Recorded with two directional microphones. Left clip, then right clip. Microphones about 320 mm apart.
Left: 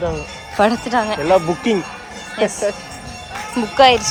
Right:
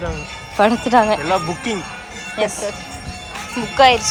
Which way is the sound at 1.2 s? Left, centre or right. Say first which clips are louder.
Left 4 dB; left.